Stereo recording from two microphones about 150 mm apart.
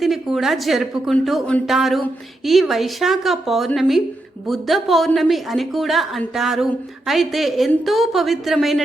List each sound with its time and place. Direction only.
0.0 s a woman's voice: centre (ahead or behind)